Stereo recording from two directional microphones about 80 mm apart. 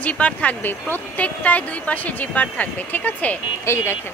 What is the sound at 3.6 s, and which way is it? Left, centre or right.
Speech, left.